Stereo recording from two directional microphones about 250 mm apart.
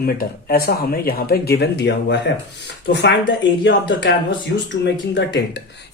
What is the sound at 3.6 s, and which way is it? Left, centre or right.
Speech, left.